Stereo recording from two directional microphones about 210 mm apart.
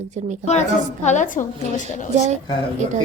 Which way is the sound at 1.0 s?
35° left (ahead or behind).